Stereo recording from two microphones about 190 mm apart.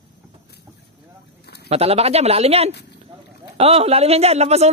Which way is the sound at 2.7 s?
60° left (ahead or behind).